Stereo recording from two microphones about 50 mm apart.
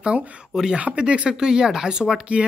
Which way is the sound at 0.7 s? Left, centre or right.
Right.